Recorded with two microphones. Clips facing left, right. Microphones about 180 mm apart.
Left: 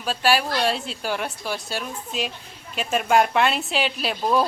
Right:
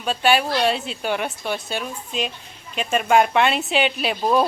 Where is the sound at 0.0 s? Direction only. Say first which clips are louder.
Right 2 dB; centre (ahead or behind).